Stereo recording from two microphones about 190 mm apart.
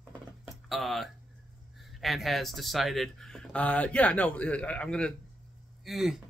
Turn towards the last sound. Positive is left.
turn(degrees=0)  # may be behind; listen again after turning